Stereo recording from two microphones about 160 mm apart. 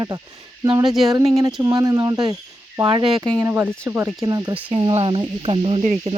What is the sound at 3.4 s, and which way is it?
Speech, 15° right (ahead or behind).